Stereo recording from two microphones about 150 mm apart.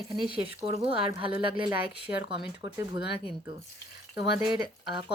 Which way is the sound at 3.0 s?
90° left.